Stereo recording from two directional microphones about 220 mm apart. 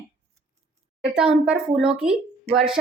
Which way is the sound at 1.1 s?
5° right (ahead or behind).